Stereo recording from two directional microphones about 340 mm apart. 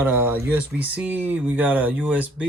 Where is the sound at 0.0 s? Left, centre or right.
Centre.